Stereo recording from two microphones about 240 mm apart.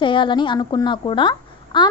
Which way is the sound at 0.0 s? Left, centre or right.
Centre.